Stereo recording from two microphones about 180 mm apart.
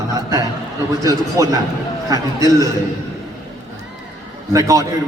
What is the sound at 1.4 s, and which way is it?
Speech, 15° right (ahead or behind).